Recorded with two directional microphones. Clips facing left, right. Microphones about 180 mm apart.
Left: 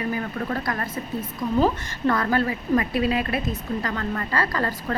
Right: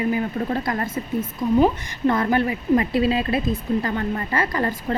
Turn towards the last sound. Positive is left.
turn(degrees=-20)  # may be behind; listen again after turning